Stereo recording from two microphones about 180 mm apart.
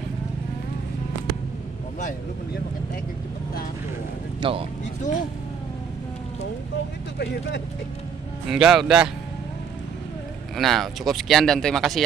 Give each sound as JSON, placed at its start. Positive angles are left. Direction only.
{"t": 4.4, "sound": "speech", "side_deg": -30}
{"t": 8.5, "sound": "speech", "side_deg": -5}
{"t": 10.5, "sound": "speech", "side_deg": 0}